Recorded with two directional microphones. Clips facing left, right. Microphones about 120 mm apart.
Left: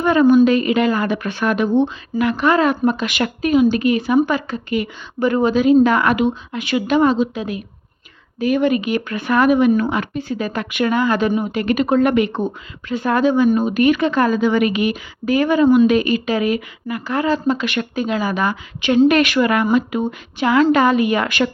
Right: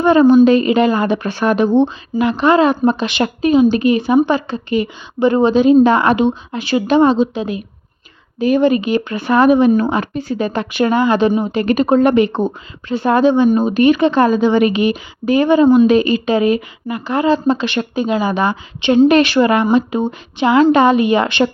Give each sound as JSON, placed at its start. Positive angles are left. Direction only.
{"t": 0.0, "sound": "speech", "side_deg": -30}